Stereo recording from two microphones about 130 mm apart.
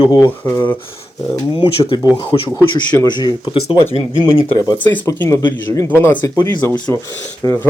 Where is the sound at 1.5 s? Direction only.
40° left (ahead or behind).